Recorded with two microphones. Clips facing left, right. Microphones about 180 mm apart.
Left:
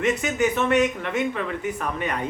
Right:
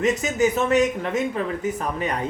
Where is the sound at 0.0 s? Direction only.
35° right (ahead or behind).